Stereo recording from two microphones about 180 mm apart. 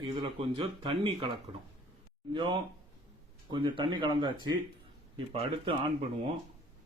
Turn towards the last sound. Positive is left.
turn(degrees=-35)  # may be behind; listen again after turning